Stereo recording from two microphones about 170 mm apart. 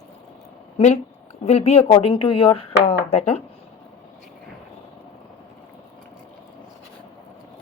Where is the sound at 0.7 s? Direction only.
45° left (ahead or behind).